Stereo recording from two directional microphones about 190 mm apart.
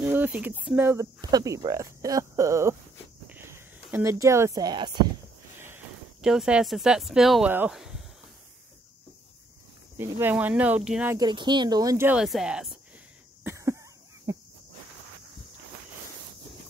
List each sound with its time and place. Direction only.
0.0 s speech: 10° right (ahead or behind)
6.2 s speech: 5° right (ahead or behind)
9.9 s speech: 15° right (ahead or behind)
11.1 s speech: 25° right (ahead or behind); by 12.7 s 5° right (ahead or behind)
13.4 s a sound: 15° right (ahead or behind)
14.3 s cricket: 15° right (ahead or behind)